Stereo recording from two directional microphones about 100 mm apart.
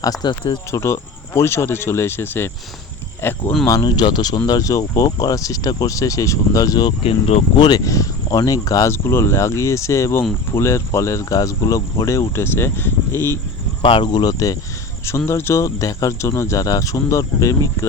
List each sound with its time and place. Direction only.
0.0 s speech: 40° left (ahead or behind)
0.7 s speech: 30° left (ahead or behind)
3.8 s speech: 50° left (ahead or behind)
7.0 s speech: 80° left
7.5 s speech: 45° left (ahead or behind); by 13.4 s 25° left (ahead or behind)
13.8 s speech: 60° left (ahead or behind)
14.1 s speech: 40° left (ahead or behind)
15.3 s speech: 25° left (ahead or behind)